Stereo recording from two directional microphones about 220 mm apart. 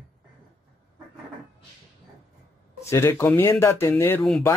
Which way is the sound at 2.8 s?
10° left (ahead or behind).